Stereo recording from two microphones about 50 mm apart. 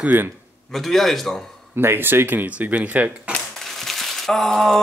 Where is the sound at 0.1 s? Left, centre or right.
Right.